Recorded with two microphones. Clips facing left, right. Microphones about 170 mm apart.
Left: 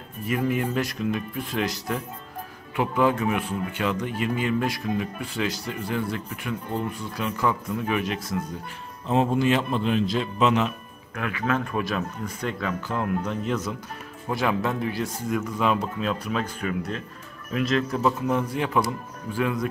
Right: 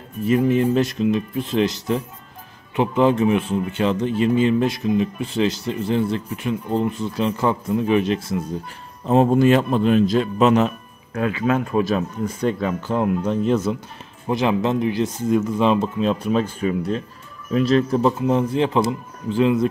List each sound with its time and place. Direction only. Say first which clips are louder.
0.3 s speech: right 8 dB; 25° right (ahead or behind)
9.0 s speech: right 7 dB; 40° right (ahead or behind)
11.1 s speech: right 6 dB; 25° right (ahead or behind)